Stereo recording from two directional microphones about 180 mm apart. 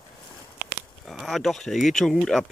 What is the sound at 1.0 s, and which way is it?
Speech, centre (ahead or behind).